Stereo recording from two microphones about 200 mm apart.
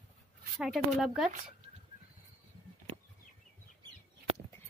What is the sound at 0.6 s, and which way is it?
Speech, centre (ahead or behind).